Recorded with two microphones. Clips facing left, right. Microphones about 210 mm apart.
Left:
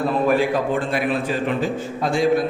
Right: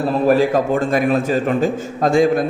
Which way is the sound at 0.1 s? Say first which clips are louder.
Right 6 dB; 40° right (ahead or behind).